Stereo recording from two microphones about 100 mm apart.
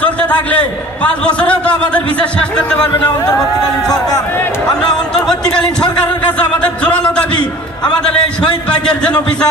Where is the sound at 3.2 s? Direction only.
40° left (ahead or behind).